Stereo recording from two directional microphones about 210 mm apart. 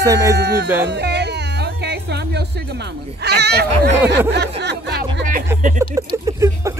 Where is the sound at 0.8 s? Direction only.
55° right (ahead or behind).